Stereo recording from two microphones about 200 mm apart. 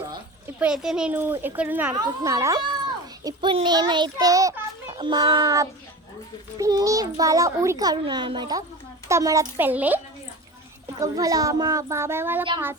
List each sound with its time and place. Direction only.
0.6 s a child's voice: 5° right (ahead or behind)
11.0 s speech: 15° right (ahead or behind)